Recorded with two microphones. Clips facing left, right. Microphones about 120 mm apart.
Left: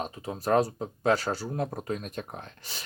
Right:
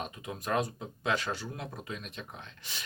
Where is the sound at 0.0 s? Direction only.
35° left (ahead or behind).